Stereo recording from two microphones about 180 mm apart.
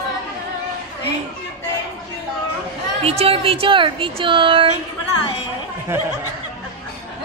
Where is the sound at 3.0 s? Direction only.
35° right (ahead or behind).